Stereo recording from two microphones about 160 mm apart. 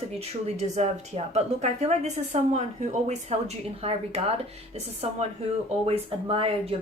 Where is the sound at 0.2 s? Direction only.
45° right (ahead or behind).